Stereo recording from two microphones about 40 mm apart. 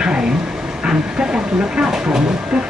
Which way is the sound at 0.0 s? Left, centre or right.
Right.